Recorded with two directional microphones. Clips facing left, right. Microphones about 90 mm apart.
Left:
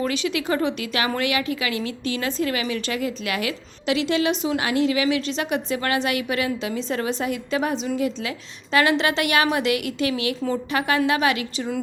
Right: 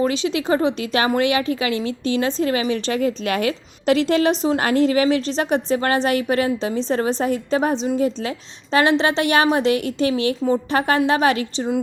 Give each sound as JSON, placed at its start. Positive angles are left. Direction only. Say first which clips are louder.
{"t": 0.0, "sound": "a woman's voice", "louder": "right 4 dB", "side_deg": -25}